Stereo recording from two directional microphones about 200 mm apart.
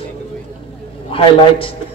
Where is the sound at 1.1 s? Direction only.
25° left (ahead or behind).